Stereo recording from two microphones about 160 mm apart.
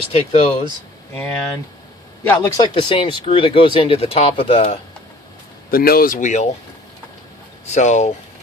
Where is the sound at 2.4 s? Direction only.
20° left (ahead or behind).